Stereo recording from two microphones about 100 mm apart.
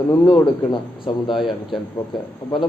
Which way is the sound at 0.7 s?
55° left (ahead or behind).